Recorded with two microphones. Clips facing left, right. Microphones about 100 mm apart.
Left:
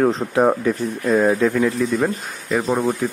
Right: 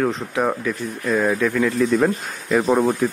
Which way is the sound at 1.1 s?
25° left (ahead or behind).